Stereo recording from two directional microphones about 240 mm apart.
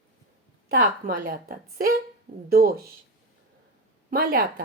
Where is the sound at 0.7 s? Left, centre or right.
Right.